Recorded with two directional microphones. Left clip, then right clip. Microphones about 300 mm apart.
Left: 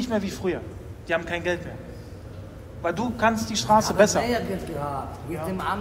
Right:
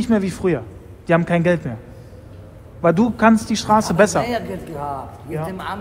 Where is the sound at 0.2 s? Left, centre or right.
Right.